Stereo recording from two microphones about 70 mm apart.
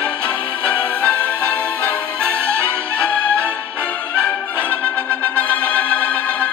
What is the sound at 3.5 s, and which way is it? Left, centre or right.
Music, left.